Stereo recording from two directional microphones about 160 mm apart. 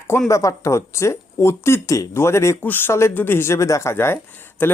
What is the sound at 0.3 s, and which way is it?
Speech, 20° left (ahead or behind).